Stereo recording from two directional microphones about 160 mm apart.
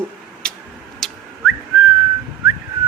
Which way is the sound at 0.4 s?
5° left (ahead or behind).